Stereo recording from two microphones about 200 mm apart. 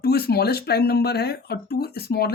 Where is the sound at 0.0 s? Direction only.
50° left (ahead or behind).